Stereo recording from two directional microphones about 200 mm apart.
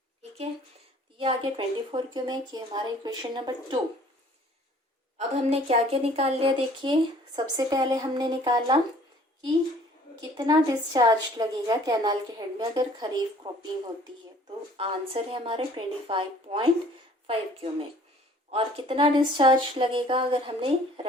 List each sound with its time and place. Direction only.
1.2 s a woman's voice: 25° right (ahead or behind)
5.1 s a woman's voice: 30° right (ahead or behind)
10.3 s a woman's voice: 20° right (ahead or behind)
14.8 s a woman's voice: 25° right (ahead or behind)